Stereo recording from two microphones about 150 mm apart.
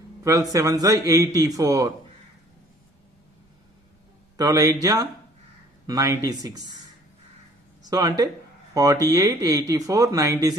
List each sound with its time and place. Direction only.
0.2 s speech: 20° right (ahead or behind)
4.4 s speech: 25° right (ahead or behind)
7.8 s speech: 25° right (ahead or behind)